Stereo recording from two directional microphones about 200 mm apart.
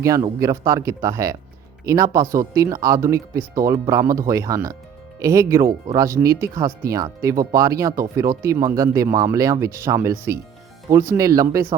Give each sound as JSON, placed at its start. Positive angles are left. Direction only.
{"t": 0.0, "sound": "speech", "side_deg": -15}